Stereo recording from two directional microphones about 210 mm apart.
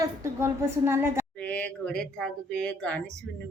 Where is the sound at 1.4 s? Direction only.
5° left (ahead or behind).